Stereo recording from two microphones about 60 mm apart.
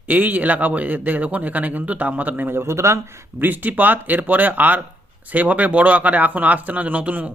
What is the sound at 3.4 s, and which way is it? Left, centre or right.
Speech, right.